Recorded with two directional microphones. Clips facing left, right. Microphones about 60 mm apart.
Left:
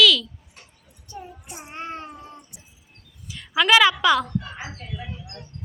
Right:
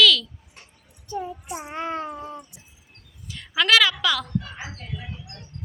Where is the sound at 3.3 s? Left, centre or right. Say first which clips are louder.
Left 2 dB; centre.